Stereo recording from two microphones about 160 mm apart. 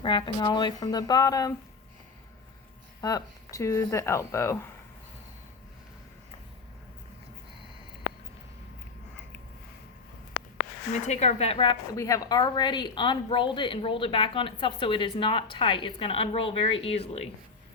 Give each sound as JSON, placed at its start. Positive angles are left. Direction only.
{"t": 0.0, "sound": "speech", "side_deg": 30}
{"t": 3.0, "sound": "speech", "side_deg": 25}
{"t": 11.0, "sound": "a woman's voice", "side_deg": 45}
{"t": 11.9, "sound": "a woman's voice", "side_deg": 20}